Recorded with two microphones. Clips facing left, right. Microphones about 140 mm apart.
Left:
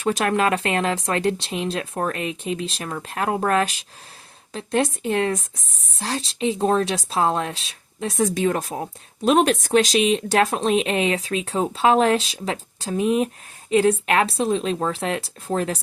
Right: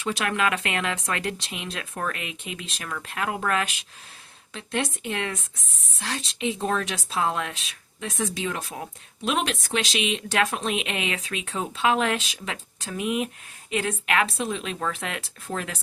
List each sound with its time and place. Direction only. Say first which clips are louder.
0.0 s speech: left 5 dB; 45° left (ahead or behind)